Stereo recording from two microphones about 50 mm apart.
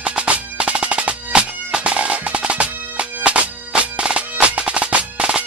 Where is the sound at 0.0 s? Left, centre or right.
Right.